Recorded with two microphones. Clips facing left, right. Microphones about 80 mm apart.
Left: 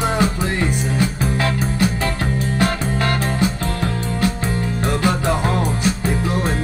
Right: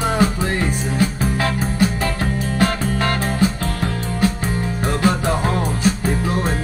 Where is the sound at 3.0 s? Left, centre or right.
Right.